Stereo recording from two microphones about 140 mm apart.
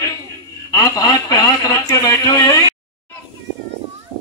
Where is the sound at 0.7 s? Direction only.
25° left (ahead or behind).